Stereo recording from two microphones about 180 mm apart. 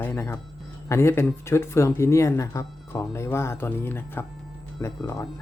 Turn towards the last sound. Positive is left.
turn(degrees=15)  # may be behind; listen again after turning